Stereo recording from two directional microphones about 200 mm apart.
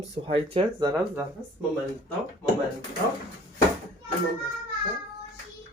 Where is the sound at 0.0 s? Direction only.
30° right (ahead or behind).